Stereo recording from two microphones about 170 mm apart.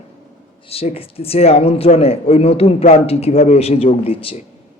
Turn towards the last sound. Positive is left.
turn(degrees=35)  # may be behind; listen again after turning